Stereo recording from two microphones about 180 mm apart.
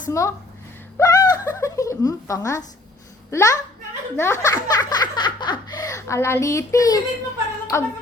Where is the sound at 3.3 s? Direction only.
15° left (ahead or behind).